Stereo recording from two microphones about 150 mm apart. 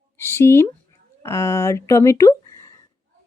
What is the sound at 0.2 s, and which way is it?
Speech, 15° left (ahead or behind).